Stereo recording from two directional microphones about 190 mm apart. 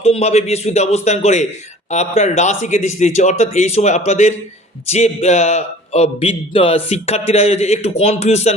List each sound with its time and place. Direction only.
0.0 s a man's voice: 35° left (ahead or behind)